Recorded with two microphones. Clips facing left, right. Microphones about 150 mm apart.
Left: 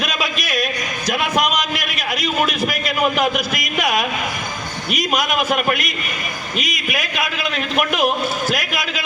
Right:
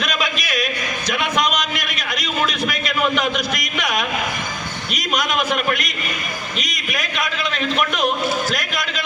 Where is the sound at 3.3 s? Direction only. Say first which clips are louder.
Left 1 dB; 5° left (ahead or behind).